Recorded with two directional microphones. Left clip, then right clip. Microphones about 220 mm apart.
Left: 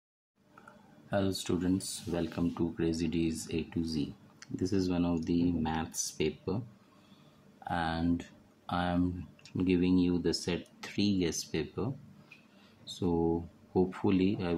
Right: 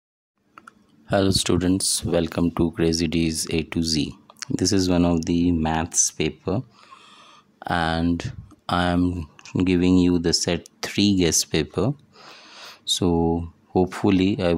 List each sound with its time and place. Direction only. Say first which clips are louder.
1.1 s speech: right 12 dB; 45° right (ahead or behind)
7.6 s speech: right 10 dB; 50° right (ahead or behind)
12.5 s a sound: right 18 dB; 50° right (ahead or behind)
13.7 s speech: right 9 dB; 50° right (ahead or behind)